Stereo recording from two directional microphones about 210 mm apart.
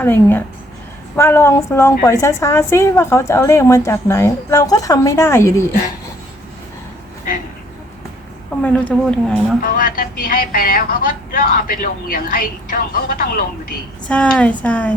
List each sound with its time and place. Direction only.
0.0 s a woman's voice: 10° left (ahead or behind)
8.6 s speech: 5° left (ahead or behind)
9.6 s speech: 40° left (ahead or behind)
14.1 s a woman's voice: 5° left (ahead or behind)